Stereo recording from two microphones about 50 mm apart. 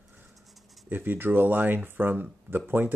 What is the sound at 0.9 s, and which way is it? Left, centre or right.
Speech, right.